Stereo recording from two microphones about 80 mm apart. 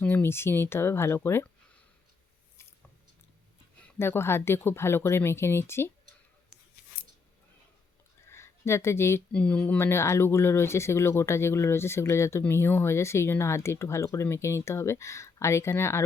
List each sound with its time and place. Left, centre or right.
0.0 s speech: left
3.9 s speech: left
8.3 s a sound: left
9.3 s speech: centre
9.7 s speech: left